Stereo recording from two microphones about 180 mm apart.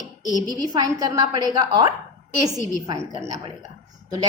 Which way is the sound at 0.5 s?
20° right (ahead or behind).